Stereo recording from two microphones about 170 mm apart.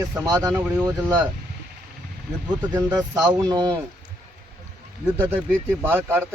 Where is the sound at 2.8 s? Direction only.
15° right (ahead or behind).